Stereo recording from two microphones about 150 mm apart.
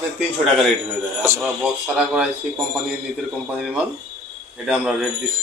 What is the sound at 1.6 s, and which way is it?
Speech, 10° right (ahead or behind).